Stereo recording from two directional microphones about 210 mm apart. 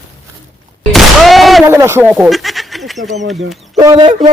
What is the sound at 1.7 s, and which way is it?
Speech, 10° right (ahead or behind).